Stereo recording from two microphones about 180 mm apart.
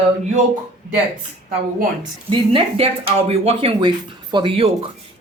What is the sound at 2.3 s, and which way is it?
Speech, 30° right (ahead or behind).